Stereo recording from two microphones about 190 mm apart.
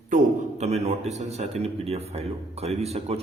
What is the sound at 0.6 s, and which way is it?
A man's voice, 35° right (ahead or behind).